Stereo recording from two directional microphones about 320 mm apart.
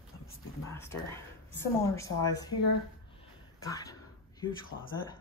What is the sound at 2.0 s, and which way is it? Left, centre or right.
Speech, centre.